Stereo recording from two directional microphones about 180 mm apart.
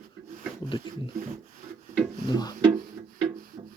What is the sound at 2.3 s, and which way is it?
Speech, 20° left (ahead or behind).